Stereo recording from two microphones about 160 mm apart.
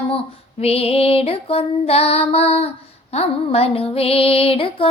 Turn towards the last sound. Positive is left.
turn(degrees=35)  # may be behind; listen again after turning